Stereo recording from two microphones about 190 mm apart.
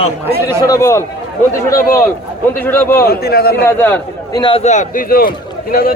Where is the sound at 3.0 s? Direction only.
55° left (ahead or behind).